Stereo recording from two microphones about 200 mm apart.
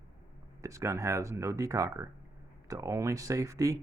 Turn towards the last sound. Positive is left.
turn(degrees=-15)  # may be behind; listen again after turning